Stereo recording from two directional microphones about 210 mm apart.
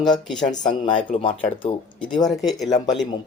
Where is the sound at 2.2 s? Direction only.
Centre (ahead or behind).